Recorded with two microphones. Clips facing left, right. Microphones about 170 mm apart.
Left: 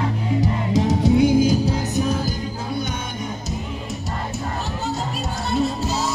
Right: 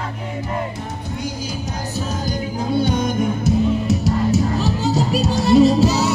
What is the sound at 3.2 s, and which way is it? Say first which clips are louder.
Music: right 11 dB; 65° right (ahead or behind).